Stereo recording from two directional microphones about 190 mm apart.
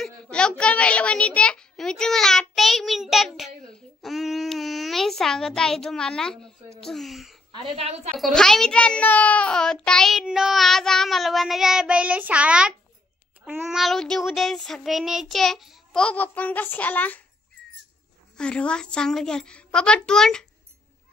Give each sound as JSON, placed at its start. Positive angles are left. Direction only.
{"t": 0.0, "sound": "a child's voice", "side_deg": 5}
{"t": 7.6, "sound": "a woman's voice", "side_deg": -30}
{"t": 8.2, "sound": "a child's voice", "side_deg": 0}
{"t": 18.4, "sound": "a child's voice", "side_deg": 5}